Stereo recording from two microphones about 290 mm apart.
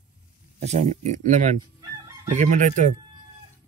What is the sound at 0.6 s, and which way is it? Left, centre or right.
Speech, right.